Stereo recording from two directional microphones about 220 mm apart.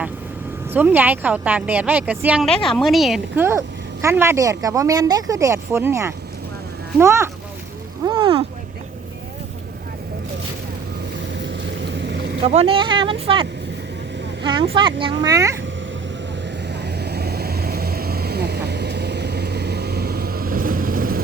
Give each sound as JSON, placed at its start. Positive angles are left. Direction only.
{"t": 0.7, "sound": "a woman's voice", "side_deg": -10}
{"t": 8.0, "sound": "a sound", "side_deg": -20}
{"t": 11.9, "sound": "vehicle", "side_deg": -50}
{"t": 12.4, "sound": "a child's voice", "side_deg": -30}
{"t": 16.8, "sound": "vehicle", "side_deg": -50}